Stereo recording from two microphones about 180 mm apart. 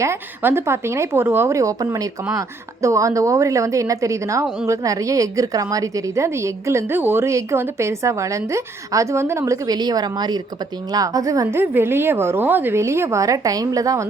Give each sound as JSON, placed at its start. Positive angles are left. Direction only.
{"t": 0.0, "sound": "a woman's voice", "side_deg": -15}